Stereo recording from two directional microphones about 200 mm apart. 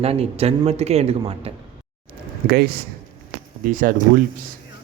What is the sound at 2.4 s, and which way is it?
Speech, 55° right (ahead or behind).